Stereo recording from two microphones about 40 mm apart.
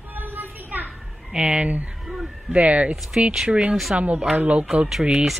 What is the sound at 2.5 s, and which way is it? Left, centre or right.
Speech, right.